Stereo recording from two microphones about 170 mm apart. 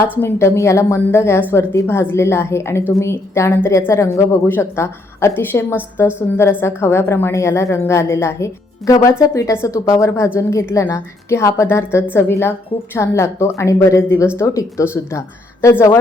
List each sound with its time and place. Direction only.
0.2 s a woman's voice: 15° left (ahead or behind)